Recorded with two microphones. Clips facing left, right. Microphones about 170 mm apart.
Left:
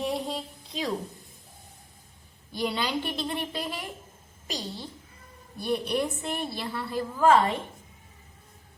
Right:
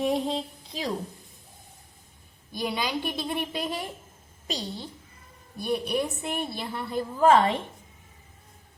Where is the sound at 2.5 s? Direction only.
10° right (ahead or behind).